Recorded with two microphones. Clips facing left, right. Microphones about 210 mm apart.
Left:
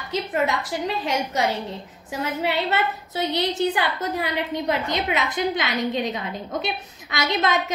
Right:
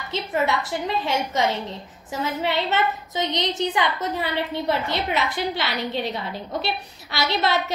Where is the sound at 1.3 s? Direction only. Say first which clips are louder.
Even; 10° left (ahead or behind).